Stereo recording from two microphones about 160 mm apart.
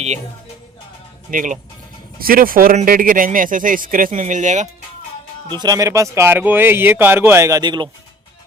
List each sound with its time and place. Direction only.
1.3 s speech: 55° right (ahead or behind)
2.1 s speech: 65° right (ahead or behind); by 4.7 s 50° right (ahead or behind)
5.5 s speech: 25° right (ahead or behind)